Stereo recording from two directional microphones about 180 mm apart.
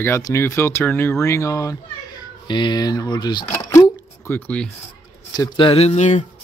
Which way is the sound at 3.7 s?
15° left (ahead or behind).